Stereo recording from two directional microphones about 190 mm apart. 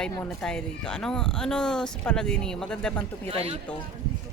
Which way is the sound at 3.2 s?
30° right (ahead or behind).